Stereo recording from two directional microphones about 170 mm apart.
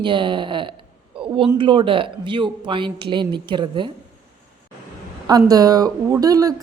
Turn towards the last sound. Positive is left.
turn(degrees=-20)  # may be behind; listen again after turning